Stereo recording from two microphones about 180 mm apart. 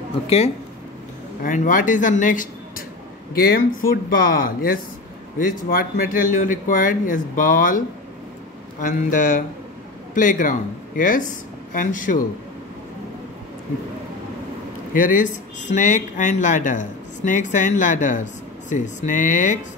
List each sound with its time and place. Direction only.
1.4 s speech: 45° left (ahead or behind)
3.8 s speech: 50° left (ahead or behind)
8.8 s speech: 45° left (ahead or behind)
15.0 s speech: 50° left (ahead or behind)